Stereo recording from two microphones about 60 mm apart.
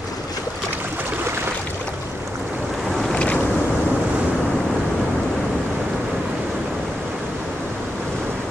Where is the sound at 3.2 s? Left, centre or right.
Centre.